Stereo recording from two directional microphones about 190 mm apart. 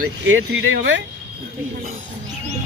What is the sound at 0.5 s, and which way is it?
Speech, 75° right (ahead or behind).